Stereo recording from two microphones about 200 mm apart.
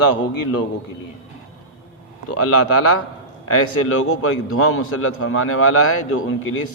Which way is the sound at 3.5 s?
90° left.